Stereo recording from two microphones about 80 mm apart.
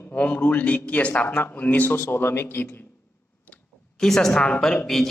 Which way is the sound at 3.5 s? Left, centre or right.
Centre.